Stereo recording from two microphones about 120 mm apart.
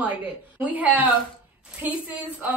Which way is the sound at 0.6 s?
10° right (ahead or behind).